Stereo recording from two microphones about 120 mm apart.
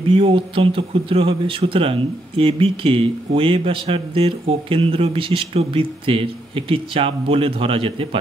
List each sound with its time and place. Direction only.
0.1 s speech: 50° right (ahead or behind)